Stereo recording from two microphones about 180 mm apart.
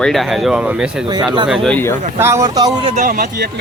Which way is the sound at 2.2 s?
15° right (ahead or behind).